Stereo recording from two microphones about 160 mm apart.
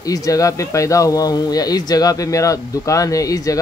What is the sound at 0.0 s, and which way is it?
A man's voice, 20° left (ahead or behind).